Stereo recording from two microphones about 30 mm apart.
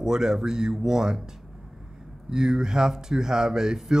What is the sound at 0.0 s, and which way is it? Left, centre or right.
Speech, right.